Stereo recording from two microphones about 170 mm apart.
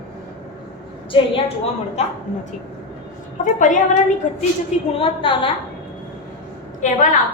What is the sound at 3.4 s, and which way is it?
Speech, 50° left (ahead or behind).